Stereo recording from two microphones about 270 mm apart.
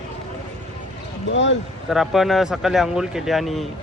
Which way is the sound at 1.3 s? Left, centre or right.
Left.